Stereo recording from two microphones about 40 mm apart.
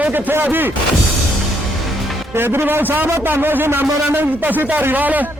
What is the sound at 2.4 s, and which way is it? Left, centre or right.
Speech, right.